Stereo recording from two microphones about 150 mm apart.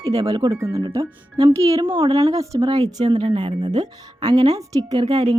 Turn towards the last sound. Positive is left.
turn(degrees=-25)  # may be behind; listen again after turning